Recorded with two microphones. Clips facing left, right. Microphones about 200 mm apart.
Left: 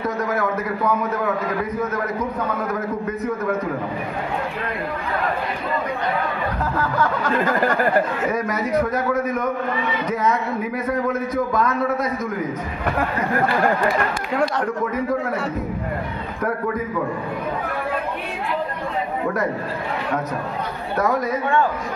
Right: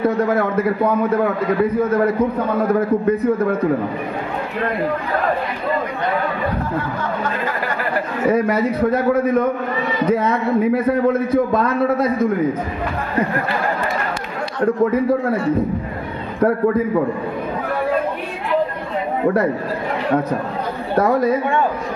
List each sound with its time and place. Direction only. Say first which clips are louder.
0.0 s a man's voice: right 6 dB; 30° right (ahead or behind)
6.6 s music: left 1 dB; 90° left
7.3 s chatter: left 4 dB; 45° left (ahead or behind)
8.3 s a man's voice: right 5 dB; 30° right (ahead or behind)
14.6 s a man's voice: right 7 dB; 30° right (ahead or behind)
16.3 s a man's voice: right 8 dB; 30° right (ahead or behind)
20.9 s a man's voice: right 5 dB; 30° right (ahead or behind)